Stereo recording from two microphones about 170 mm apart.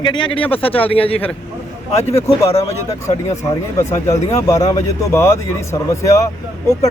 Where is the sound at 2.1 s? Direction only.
15° left (ahead or behind).